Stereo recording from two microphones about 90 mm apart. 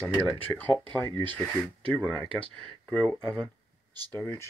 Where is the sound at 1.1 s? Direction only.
60° right (ahead or behind).